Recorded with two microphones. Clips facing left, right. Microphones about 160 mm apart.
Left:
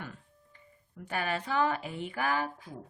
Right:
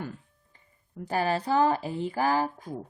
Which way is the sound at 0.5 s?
35° right (ahead or behind).